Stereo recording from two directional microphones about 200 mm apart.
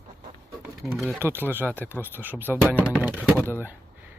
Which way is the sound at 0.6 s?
10° right (ahead or behind).